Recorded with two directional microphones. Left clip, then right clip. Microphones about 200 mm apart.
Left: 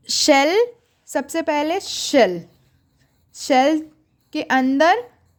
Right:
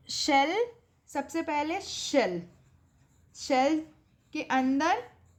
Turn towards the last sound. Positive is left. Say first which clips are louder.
# left 11 dB
turn(degrees=50)  # may be behind; listen again after turning